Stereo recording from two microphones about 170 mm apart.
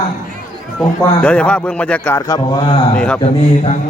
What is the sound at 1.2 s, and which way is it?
A man's voice, 5° left (ahead or behind).